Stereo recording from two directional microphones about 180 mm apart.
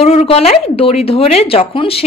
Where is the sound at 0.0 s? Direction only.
35° left (ahead or behind).